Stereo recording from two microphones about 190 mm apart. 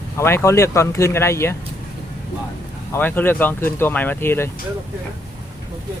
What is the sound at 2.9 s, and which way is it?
Speech, 10° left (ahead or behind).